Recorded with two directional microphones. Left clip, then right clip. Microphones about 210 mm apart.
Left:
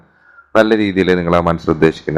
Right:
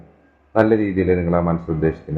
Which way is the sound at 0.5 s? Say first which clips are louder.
Left 4 dB; 35° left (ahead or behind).